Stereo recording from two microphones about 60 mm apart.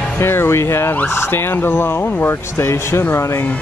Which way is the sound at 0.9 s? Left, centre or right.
Left.